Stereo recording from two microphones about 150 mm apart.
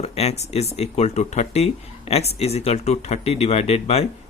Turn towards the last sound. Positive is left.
turn(degrees=45)  # may be behind; listen again after turning